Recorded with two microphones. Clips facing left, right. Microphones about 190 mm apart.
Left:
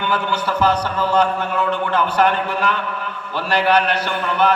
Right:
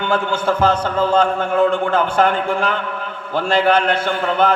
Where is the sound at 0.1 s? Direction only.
50° right (ahead or behind).